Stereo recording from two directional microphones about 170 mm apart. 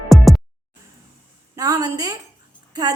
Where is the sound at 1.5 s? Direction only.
20° right (ahead or behind).